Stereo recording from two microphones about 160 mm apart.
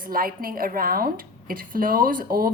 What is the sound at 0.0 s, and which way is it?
Speech, 65° right (ahead or behind).